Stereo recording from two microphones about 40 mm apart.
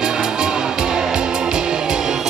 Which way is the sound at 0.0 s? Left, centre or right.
Centre.